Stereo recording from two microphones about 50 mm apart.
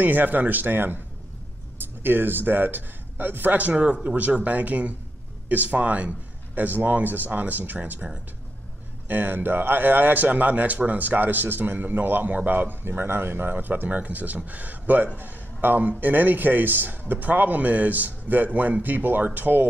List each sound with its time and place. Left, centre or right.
0.0 s a man's voice: right
3.7 s a man's voice: right